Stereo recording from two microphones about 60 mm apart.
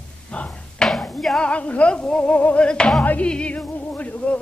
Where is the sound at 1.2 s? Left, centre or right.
Centre.